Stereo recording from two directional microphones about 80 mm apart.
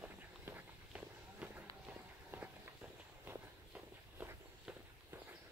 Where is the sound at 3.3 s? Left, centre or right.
Right.